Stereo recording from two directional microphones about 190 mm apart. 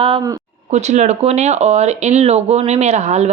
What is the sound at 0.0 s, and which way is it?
Speech, 30° right (ahead or behind).